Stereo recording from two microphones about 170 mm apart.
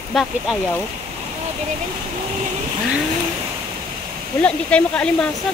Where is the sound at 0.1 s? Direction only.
Centre (ahead or behind).